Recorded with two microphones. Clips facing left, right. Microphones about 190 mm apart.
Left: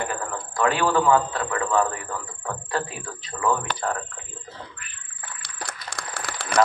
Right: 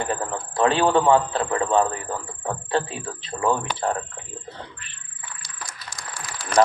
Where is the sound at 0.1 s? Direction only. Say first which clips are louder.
Right 3 dB; 30° right (ahead or behind).